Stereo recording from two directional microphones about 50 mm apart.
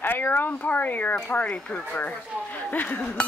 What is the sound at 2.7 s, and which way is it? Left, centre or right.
Speech, left.